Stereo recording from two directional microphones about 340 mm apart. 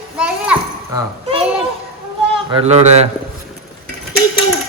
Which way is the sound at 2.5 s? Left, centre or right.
Centre.